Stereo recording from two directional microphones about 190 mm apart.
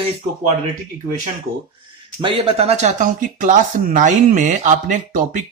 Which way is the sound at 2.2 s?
30° right (ahead or behind).